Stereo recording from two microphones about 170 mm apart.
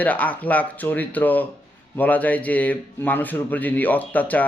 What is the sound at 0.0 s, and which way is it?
Speech, 10° left (ahead or behind).